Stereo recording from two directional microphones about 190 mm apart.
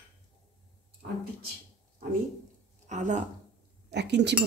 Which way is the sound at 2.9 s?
40° right (ahead or behind).